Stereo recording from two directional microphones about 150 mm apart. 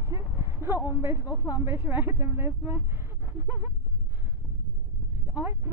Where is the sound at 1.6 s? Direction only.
15° right (ahead or behind).